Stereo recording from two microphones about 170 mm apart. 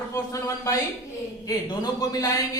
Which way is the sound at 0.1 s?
20° left (ahead or behind).